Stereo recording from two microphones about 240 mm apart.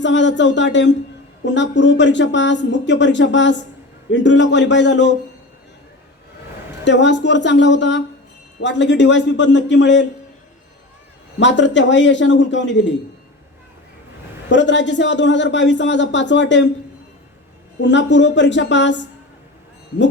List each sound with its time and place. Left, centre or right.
0.0 s a man's voice: left
6.8 s a man's voice: left
11.3 s a man's voice: left
14.5 s a man's voice: left
17.7 s a man's voice: left